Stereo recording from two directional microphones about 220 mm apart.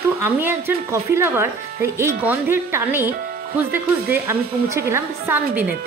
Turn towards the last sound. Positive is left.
turn(degrees=-10)  # may be behind; listen again after turning